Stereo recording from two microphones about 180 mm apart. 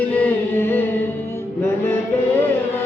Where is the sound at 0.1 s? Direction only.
10° left (ahead or behind).